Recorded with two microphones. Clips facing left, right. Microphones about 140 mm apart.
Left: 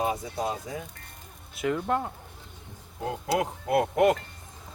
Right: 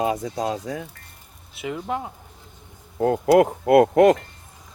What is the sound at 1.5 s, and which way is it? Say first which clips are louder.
Speech: left 1 dB; 5° right (ahead or behind).